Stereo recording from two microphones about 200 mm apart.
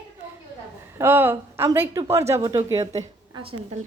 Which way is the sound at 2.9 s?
25° right (ahead or behind).